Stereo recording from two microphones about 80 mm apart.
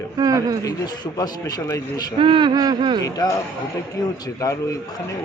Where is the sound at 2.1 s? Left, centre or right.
Right.